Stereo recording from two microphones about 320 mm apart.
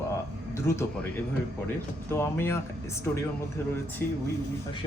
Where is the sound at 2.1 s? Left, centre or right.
Centre.